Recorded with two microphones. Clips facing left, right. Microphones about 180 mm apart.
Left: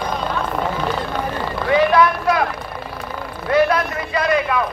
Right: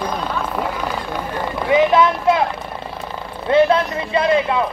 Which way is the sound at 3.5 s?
25° right (ahead or behind).